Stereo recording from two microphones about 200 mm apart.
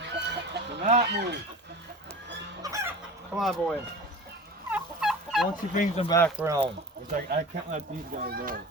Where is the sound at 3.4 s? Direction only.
Centre (ahead or behind).